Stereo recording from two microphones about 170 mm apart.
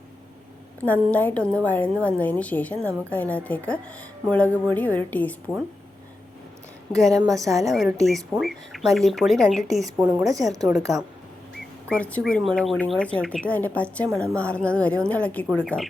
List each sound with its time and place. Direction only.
0.8 s speech: 10° left (ahead or behind)
6.9 s speech: centre (ahead or behind)
7.2 s a woman's voice: 20° right (ahead or behind)
7.5 s speech: centre (ahead or behind)
11.9 s speech: 5° left (ahead or behind)